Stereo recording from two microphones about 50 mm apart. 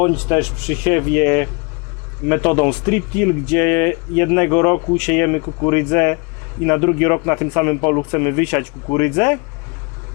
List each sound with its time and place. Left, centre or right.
0.0 s a man's voice: left